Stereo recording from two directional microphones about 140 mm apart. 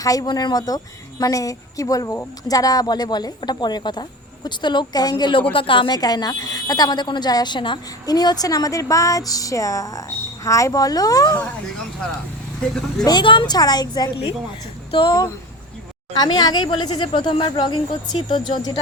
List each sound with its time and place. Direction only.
0.0 s a woman's voice: 25° left (ahead or behind)
12.6 s speech: 5° left (ahead or behind)
13.1 s a woman's voice: 35° left (ahead or behind)